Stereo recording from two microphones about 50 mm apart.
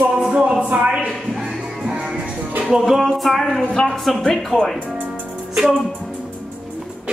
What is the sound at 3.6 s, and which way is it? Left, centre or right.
Speech, centre.